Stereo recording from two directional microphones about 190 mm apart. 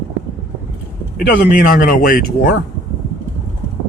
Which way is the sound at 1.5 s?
45° left (ahead or behind).